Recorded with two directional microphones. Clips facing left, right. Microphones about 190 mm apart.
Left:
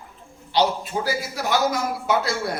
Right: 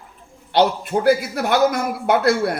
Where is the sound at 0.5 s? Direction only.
55° right (ahead or behind).